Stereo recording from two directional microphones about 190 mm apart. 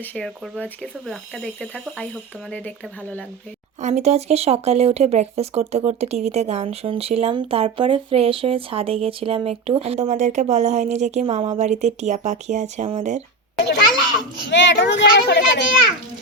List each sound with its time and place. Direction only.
0.0 s speech: 10° left (ahead or behind)
3.8 s speech: 40° right (ahead or behind)
14.5 s speech: 70° left (ahead or behind)